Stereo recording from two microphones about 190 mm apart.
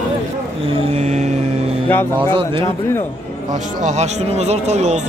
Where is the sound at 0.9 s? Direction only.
35° right (ahead or behind).